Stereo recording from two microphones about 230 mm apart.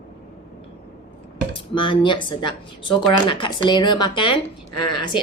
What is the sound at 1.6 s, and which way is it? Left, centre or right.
Speech, left.